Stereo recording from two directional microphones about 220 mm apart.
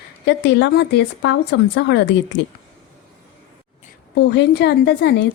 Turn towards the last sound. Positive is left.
turn(degrees=50)  # may be behind; listen again after turning